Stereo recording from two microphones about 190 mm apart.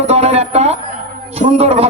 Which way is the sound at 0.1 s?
35° right (ahead or behind).